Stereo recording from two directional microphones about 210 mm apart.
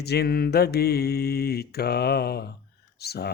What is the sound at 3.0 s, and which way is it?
Speech, 50° left (ahead or behind).